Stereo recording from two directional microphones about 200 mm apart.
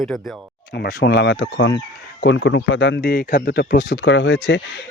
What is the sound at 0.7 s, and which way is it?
Speech, 55° left (ahead or behind).